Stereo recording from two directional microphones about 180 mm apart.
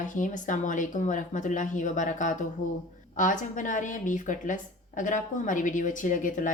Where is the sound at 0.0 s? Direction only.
45° left (ahead or behind).